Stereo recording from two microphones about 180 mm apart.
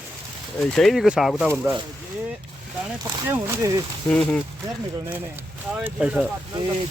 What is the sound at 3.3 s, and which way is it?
Speech, 15° right (ahead or behind).